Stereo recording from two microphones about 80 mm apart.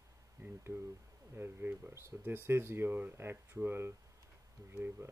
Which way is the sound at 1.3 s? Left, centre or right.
Right.